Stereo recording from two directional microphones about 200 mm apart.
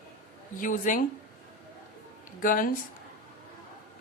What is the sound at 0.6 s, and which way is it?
Speech, 40° left (ahead or behind).